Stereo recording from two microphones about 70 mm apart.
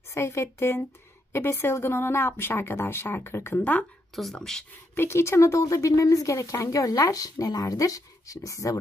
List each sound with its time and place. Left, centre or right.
0.1 s speech: left
4.1 s speech: centre
4.9 s speech: left